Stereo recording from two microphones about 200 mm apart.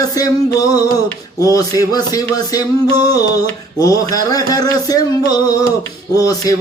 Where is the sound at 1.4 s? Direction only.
15° left (ahead or behind).